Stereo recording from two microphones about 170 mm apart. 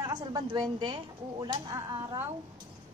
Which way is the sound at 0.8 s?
25° right (ahead or behind).